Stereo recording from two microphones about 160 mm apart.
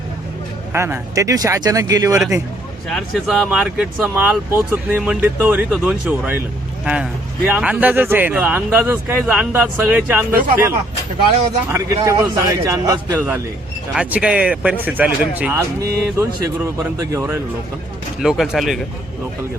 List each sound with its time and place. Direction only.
0.7 s speech: 15° right (ahead or behind)
2.9 s speech: centre (ahead or behind)
10.3 s speech: 60° right (ahead or behind)
11.7 s speech: 20° right (ahead or behind)
13.9 s speech: 5° right (ahead or behind)
15.5 s speech: 20° right (ahead or behind)
18.2 s speech: centre (ahead or behind)